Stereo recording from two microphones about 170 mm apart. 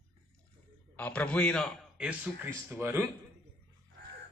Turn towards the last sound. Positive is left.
turn(degrees=-15)  # may be behind; listen again after turning